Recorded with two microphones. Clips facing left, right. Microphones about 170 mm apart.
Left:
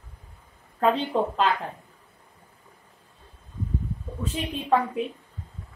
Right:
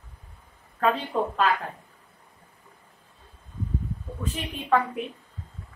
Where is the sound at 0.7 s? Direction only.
25° left (ahead or behind).